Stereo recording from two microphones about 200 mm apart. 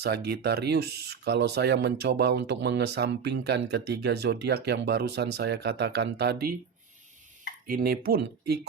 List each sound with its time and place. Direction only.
0.0 s speech: 55° right (ahead or behind)
7.7 s speech: 50° right (ahead or behind)